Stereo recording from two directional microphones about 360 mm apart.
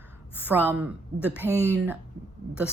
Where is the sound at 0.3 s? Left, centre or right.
Centre.